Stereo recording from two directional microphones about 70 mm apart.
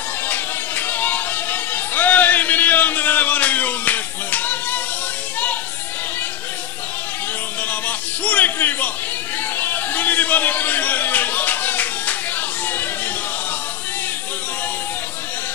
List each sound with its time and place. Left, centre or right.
0.3 s music: left
7.8 s music: left
9.6 s a sound: left